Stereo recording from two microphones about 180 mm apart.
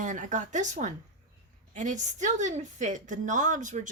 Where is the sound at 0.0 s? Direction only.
45° right (ahead or behind).